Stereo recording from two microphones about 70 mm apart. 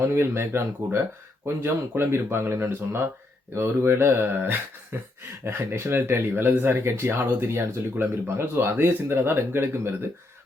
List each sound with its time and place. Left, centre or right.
0.1 s speech: right